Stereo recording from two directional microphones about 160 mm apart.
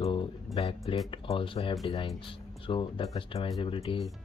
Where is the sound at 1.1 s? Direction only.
35° left (ahead or behind).